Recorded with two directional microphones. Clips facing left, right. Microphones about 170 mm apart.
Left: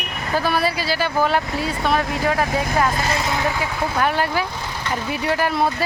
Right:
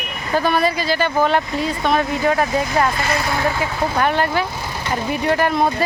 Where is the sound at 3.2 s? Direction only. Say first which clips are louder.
Right 2 dB; 20° left (ahead or behind).